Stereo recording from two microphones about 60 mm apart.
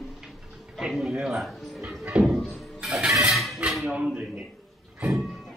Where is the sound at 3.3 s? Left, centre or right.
Centre.